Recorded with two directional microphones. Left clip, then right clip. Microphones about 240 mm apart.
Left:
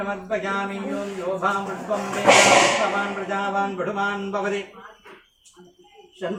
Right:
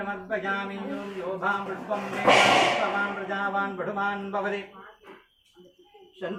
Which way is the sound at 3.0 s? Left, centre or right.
Centre.